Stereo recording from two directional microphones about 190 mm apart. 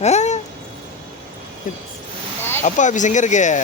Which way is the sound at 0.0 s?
35° left (ahead or behind).